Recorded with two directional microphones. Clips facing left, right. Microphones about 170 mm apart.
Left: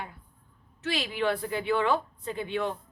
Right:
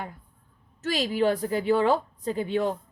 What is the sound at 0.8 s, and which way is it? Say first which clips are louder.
A woman's voice: right 5 dB; 40° right (ahead or behind).